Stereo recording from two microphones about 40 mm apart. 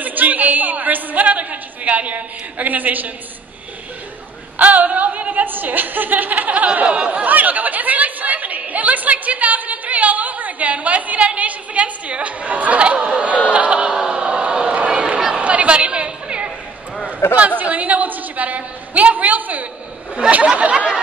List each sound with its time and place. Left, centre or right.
0.0 s a man's voice: right
4.6 s a woman's voice: right
13.5 s a sound: right
14.9 s chatter: right
17.4 s a woman's voice: right
20.2 s speech: right